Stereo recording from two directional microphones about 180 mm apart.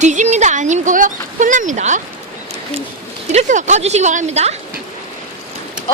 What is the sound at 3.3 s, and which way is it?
Speech, 40° right (ahead or behind).